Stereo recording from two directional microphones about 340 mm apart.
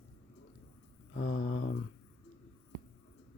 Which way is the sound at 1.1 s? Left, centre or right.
Left.